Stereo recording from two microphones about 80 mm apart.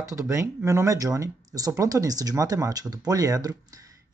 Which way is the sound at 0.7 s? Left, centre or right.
Right.